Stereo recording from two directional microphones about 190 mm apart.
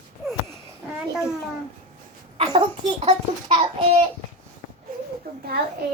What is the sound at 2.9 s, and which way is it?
Speech, 35° right (ahead or behind).